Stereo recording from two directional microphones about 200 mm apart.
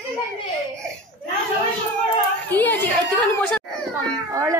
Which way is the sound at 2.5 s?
10° left (ahead or behind).